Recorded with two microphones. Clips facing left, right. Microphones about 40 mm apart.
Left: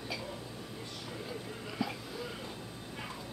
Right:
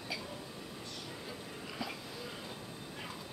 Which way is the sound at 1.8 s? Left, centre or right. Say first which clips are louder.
Left 5 dB; centre.